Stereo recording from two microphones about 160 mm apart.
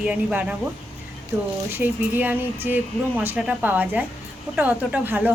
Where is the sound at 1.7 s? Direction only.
10° right (ahead or behind).